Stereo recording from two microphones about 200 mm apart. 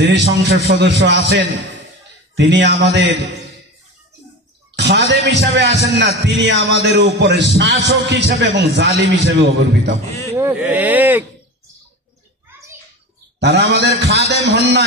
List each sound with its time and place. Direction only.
0.0 s a man's voice: 55° right (ahead or behind)
4.7 s a man's voice: 60° right (ahead or behind)
10.3 s speech: 10° right (ahead or behind)
13.4 s a man's voice: 55° right (ahead or behind)